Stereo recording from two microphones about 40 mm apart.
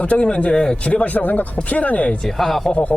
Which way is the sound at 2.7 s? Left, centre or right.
Left.